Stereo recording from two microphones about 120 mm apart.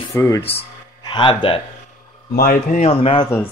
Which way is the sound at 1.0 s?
40° left (ahead or behind).